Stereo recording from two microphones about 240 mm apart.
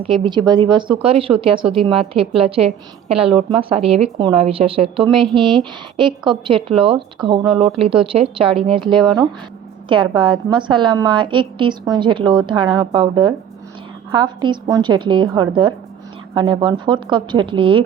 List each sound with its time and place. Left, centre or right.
0.0 s speech: right